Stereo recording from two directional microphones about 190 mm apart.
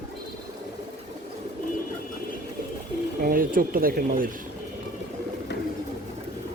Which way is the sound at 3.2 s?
45° right (ahead or behind).